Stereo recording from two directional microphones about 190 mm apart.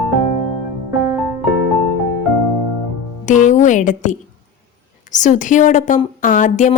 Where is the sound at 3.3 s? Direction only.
40° left (ahead or behind).